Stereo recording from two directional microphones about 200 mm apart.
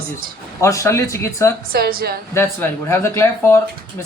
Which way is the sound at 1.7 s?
50° right (ahead or behind).